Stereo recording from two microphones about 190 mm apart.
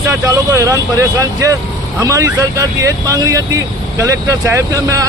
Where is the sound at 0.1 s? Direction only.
15° right (ahead or behind).